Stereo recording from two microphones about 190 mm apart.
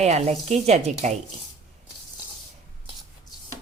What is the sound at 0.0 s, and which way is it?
A woman's voice, 35° right (ahead or behind).